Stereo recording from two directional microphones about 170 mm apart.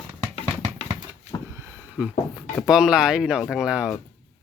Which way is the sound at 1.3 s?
20° left (ahead or behind).